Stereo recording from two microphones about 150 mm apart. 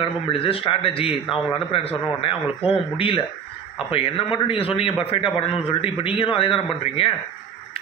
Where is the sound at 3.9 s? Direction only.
40° left (ahead or behind).